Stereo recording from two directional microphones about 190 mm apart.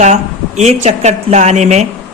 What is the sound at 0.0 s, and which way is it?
A woman's voice, 35° right (ahead or behind).